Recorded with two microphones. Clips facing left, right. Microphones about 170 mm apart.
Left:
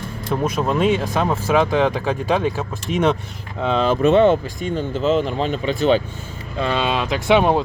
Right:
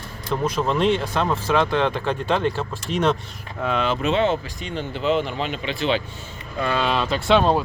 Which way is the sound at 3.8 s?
50° left (ahead or behind).